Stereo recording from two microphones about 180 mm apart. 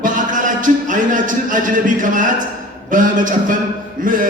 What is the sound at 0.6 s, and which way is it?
A man's voice, 45° right (ahead or behind).